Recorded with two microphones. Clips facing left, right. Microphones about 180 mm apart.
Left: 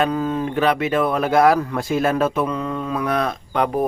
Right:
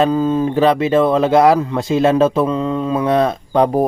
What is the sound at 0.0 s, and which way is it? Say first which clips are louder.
Speech: right 6 dB; 25° right (ahead or behind).